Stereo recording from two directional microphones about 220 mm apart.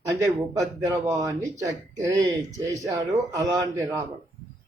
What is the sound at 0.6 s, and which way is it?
Speech, 15° right (ahead or behind).